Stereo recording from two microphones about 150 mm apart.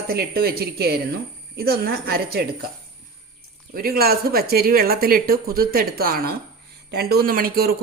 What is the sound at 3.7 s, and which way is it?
Speech, 90° right.